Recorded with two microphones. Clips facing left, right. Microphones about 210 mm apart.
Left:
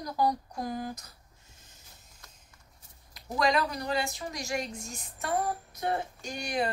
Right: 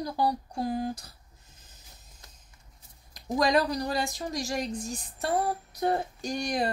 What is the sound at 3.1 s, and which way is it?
Speech, 35° right (ahead or behind).